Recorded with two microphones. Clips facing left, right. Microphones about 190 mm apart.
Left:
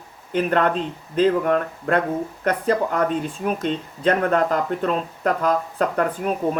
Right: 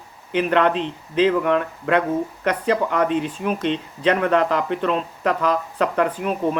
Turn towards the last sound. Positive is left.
turn(degrees=45)  # may be behind; listen again after turning